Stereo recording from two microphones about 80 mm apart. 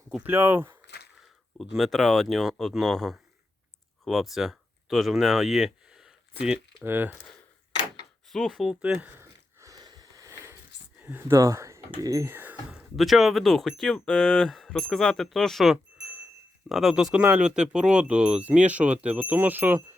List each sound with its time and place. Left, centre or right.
0.3 s speech: right
1.5 s speech: centre
6.8 s speech: right
8.3 s speech: centre
8.8 s speech: centre
9.1 s a sound: right
9.7 s a sound: right
11.0 s speech: right
11.3 s speech: right
12.3 s speech: right
12.7 s speech: centre; by 19.8 s right